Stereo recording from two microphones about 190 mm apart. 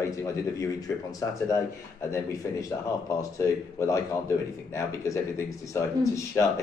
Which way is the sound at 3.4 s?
15° left (ahead or behind).